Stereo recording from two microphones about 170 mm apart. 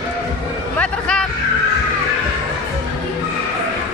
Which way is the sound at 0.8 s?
5° left (ahead or behind).